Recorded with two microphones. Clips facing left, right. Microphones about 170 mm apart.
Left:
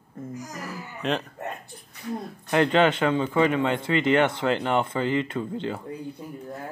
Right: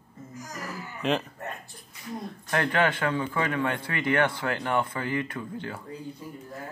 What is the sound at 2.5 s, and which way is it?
A man's voice, 20° left (ahead or behind).